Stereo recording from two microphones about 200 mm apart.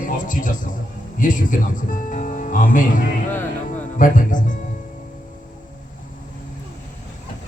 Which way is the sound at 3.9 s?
40° left (ahead or behind).